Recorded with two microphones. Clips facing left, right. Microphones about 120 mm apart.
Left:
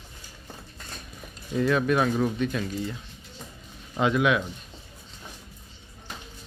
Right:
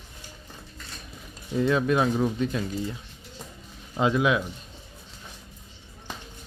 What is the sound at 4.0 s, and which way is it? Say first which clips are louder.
Speech: even; 25° right (ahead or behind).